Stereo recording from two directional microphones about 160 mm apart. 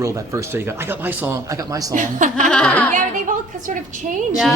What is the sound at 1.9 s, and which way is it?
Speech, 55° right (ahead or behind).